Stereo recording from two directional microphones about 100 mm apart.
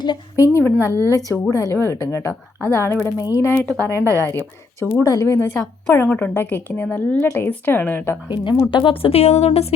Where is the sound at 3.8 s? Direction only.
30° right (ahead or behind).